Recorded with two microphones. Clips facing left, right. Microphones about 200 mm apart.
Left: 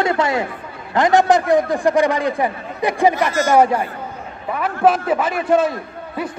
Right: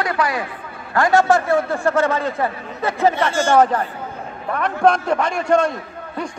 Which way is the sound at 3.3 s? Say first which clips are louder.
Even; 30° right (ahead or behind).